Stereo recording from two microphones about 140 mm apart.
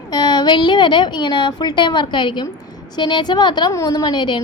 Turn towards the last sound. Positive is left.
turn(degrees=30)  # may be behind; listen again after turning